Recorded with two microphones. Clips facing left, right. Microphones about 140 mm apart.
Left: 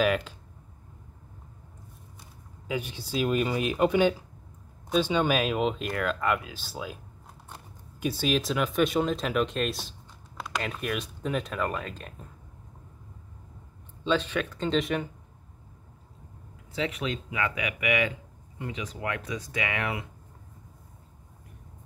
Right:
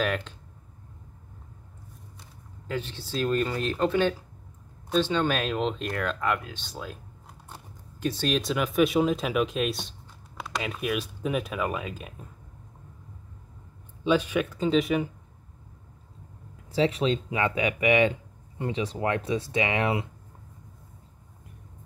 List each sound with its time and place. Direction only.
0.0 s speech: 5° left (ahead or behind)
2.7 s speech: 10° left (ahead or behind)
8.0 s speech: 10° left (ahead or behind)
14.0 s speech: 10° right (ahead or behind)
16.7 s speech: 30° right (ahead or behind)